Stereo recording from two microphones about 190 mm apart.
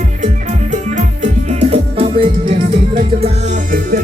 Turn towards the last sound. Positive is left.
turn(degrees=-45)  # may be behind; listen again after turning